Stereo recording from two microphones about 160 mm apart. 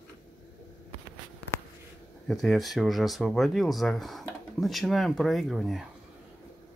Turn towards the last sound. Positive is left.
turn(degrees=0)  # may be behind; listen again after turning